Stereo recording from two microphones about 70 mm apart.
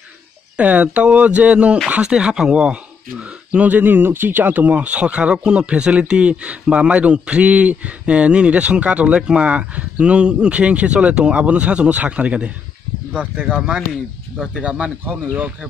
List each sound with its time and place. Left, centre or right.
0.6 s speech: right